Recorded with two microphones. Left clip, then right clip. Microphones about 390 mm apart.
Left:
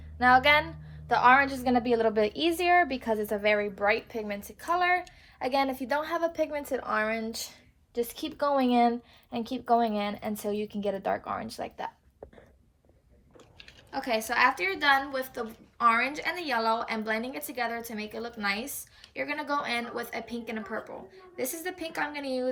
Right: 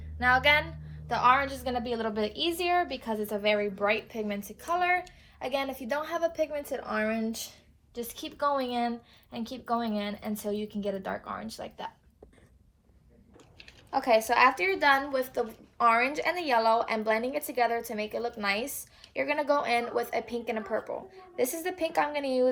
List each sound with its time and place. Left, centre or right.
0.2 s a woman's voice: centre
13.6 s a woman's voice: centre